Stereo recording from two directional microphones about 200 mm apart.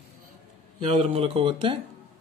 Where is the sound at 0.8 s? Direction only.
30° right (ahead or behind).